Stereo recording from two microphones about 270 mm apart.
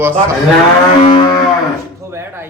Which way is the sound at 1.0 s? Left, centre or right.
Left.